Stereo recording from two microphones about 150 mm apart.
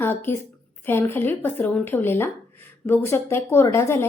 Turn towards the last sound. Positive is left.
turn(degrees=15)  # may be behind; listen again after turning